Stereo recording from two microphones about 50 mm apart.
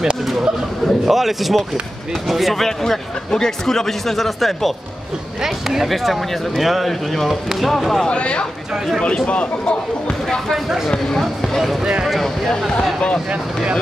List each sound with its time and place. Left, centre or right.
1.0 s speech: centre
8.1 s speech: left
11.1 s speech: centre